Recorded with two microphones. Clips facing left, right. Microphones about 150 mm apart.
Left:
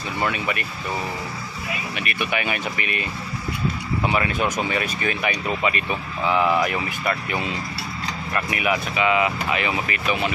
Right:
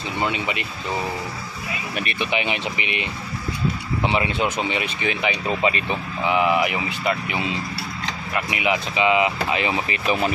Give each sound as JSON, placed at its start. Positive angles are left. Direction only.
{"t": 0.2, "sound": "speech", "side_deg": -20}
{"t": 2.0, "sound": "speech", "side_deg": -25}
{"t": 6.2, "sound": "speech", "side_deg": -15}